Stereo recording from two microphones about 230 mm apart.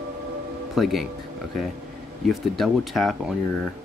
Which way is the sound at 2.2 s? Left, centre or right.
Centre.